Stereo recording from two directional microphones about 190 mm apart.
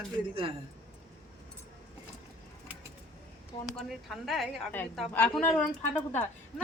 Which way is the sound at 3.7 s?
Centre (ahead or behind).